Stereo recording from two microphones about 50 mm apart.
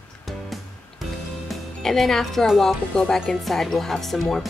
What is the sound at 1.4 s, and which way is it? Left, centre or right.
Speech, centre.